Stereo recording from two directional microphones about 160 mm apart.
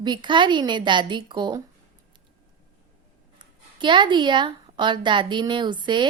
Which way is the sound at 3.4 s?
30° right (ahead or behind).